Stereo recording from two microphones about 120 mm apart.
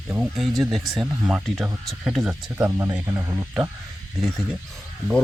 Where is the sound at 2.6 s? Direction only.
20° right (ahead or behind).